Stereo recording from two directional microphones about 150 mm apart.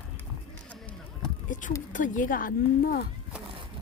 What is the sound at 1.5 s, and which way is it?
Speech, 60° left (ahead or behind).